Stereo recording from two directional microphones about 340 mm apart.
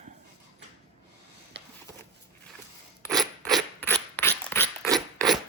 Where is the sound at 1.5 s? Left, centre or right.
Right.